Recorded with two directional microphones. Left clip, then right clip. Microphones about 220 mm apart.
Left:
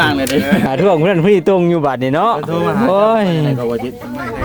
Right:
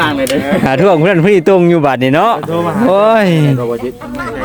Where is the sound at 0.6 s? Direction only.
20° right (ahead or behind).